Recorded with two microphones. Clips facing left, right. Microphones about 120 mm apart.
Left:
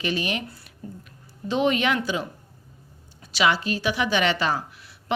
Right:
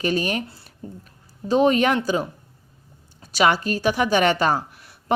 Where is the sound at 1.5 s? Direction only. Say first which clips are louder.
Right 5 dB; 40° right (ahead or behind).